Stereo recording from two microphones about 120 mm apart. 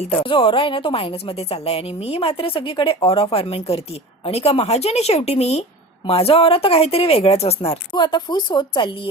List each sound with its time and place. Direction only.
0.1 s a woman's voice: 45° left (ahead or behind)
7.9 s speech: 40° left (ahead or behind)